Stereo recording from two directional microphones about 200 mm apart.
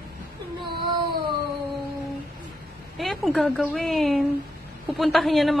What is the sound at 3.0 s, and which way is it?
A woman's voice, centre (ahead or behind).